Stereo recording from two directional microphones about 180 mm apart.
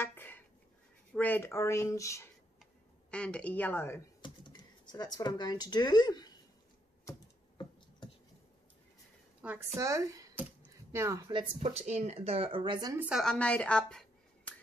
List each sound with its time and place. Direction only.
0.0 s dishes: 10° left (ahead or behind)
1.1 s speech: 10° left (ahead or behind)
3.1 s speech: 5° left (ahead or behind)
4.2 s speech: 25° left (ahead or behind)
7.1 s computer keyboard: 25° left (ahead or behind)
9.4 s speech: 15° right (ahead or behind)
11.6 s speech: 35° right (ahead or behind)
13.1 s a woman's voice: 5° left (ahead or behind)